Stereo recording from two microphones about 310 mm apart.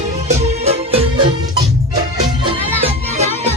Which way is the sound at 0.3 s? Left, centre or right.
Right.